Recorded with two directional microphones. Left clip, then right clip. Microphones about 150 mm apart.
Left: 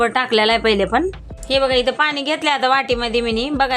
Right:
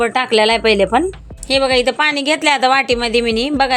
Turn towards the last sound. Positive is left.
turn(degrees=-30)  # may be behind; listen again after turning